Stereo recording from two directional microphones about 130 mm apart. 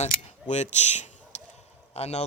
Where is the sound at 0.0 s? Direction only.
60° left (ahead or behind).